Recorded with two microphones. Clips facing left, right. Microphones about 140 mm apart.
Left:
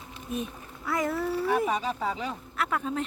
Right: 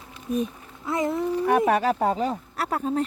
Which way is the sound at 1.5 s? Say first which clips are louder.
Right 8 dB; 65° right (ahead or behind).